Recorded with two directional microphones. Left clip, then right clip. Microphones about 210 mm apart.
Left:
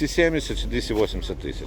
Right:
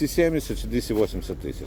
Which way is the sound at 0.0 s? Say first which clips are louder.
Left 1 dB; 45° right (ahead or behind).